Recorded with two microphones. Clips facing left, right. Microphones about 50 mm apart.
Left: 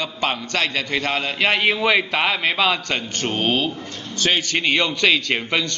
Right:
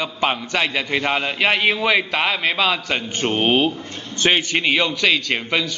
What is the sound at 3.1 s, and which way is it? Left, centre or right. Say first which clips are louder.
A man's voice: right 4 dB; centre.